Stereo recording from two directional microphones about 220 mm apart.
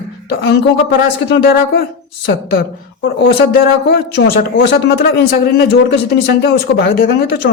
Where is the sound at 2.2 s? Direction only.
45° left (ahead or behind).